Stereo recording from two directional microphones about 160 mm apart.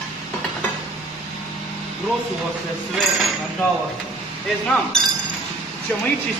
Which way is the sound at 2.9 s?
5° left (ahead or behind).